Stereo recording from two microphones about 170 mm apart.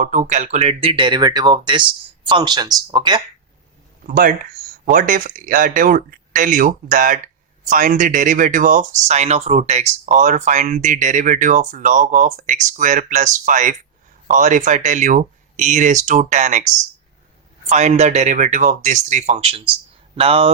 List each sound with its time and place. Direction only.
0.0 s speech: 50° right (ahead or behind); by 3.2 s 25° right (ahead or behind)
4.0 s speech: 50° right (ahead or behind); by 20.5 s 35° right (ahead or behind)